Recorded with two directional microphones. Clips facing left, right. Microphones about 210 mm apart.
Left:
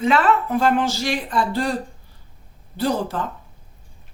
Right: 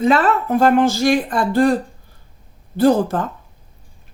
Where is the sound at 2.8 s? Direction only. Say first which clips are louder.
Right 8 dB; 50° right (ahead or behind).